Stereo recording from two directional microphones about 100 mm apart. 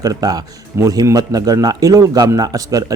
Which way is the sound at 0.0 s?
40° right (ahead or behind).